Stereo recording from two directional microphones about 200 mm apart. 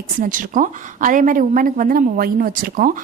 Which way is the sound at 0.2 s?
40° right (ahead or behind).